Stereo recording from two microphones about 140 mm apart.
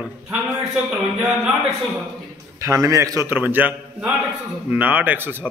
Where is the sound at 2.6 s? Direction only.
20° right (ahead or behind).